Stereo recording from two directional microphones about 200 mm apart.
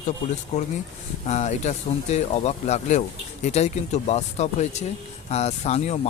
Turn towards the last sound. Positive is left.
turn(degrees=30)  # may be behind; listen again after turning